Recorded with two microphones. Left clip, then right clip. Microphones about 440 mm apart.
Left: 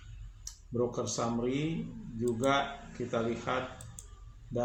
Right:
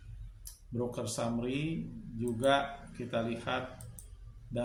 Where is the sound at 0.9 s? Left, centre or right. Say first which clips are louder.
Left 3 dB; right.